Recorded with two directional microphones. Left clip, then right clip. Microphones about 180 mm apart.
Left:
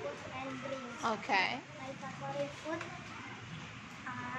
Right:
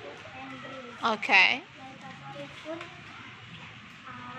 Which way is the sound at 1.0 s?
30° right (ahead or behind).